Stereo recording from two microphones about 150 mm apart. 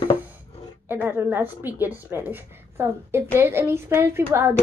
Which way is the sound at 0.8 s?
15° right (ahead or behind).